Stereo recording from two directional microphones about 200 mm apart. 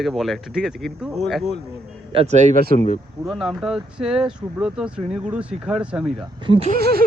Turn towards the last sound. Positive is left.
turn(degrees=-50)  # may be behind; listen again after turning